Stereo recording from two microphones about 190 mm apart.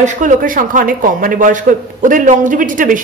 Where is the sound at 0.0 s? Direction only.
40° right (ahead or behind).